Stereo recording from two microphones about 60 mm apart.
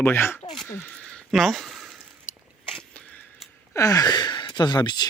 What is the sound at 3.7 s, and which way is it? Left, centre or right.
Speech, left.